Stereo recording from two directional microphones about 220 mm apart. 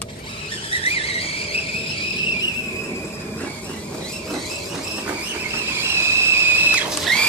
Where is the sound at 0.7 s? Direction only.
25° left (ahead or behind).